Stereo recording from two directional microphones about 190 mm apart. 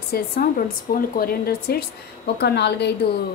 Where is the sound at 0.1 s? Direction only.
50° left (ahead or behind).